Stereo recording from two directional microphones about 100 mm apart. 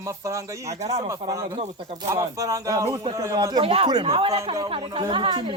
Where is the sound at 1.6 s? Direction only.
70° right (ahead or behind).